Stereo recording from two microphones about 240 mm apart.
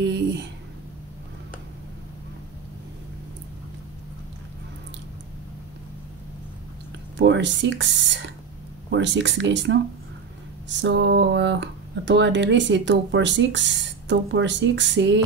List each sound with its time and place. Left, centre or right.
0.0 s speech: right
7.2 s speech: right
10.8 s speech: right